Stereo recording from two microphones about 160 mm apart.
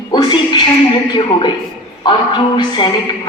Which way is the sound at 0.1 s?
30° left (ahead or behind).